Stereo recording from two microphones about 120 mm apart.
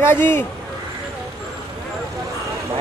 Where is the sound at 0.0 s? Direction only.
20° left (ahead or behind).